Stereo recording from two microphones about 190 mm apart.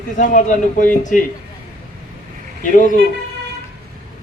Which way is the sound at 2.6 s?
45° left (ahead or behind).